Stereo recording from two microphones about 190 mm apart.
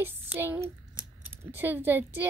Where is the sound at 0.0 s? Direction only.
10° right (ahead or behind).